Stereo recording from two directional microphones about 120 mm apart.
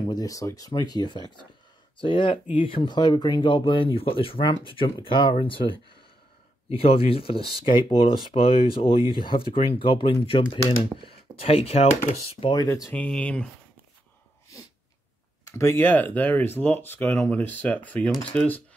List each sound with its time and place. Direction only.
0.0 s speech: 35° left (ahead or behind)
6.7 s speech: 55° left (ahead or behind)
12.4 s speech: 30° left (ahead or behind)
12.9 s speech: 10° left (ahead or behind)
15.5 s speech: 20° left (ahead or behind)